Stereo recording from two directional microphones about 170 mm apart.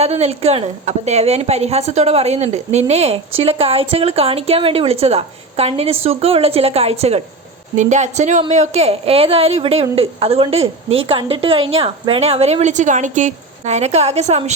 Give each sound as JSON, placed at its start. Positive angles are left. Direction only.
{"t": 0.0, "sound": "a woman's voice", "side_deg": -40}